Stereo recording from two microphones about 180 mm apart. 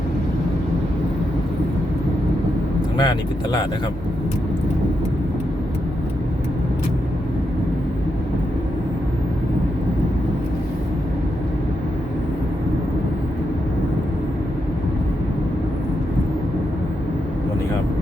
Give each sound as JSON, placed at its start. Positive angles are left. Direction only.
{"t": 3.0, "sound": "speech", "side_deg": 25}